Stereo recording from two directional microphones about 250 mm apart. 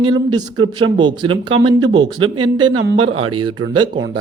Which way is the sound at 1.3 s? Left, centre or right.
Right.